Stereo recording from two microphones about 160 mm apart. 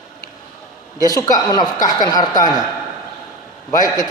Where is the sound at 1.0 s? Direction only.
25° left (ahead or behind).